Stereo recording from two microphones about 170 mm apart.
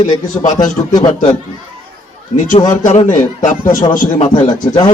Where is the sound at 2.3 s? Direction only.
45° left (ahead or behind).